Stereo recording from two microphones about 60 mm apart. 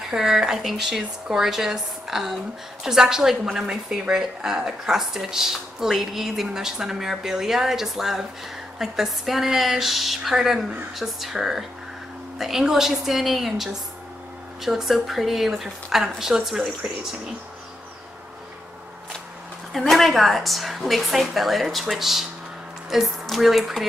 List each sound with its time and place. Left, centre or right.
0.1 s a woman's voice: centre
19.7 s a woman's voice: centre